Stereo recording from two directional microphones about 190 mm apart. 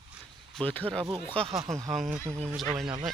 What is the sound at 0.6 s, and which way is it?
Speech, 10° left (ahead or behind).